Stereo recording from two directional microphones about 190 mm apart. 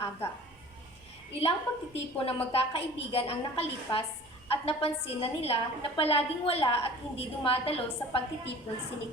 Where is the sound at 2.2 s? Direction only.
30° left (ahead or behind).